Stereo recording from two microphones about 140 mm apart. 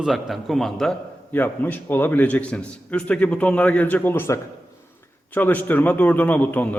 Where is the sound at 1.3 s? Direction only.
15° left (ahead or behind).